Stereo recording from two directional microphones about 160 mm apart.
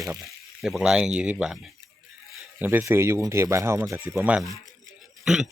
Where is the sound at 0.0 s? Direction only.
Centre (ahead or behind).